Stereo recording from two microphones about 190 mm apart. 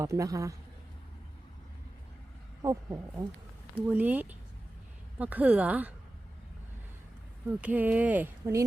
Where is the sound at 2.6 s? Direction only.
15° right (ahead or behind).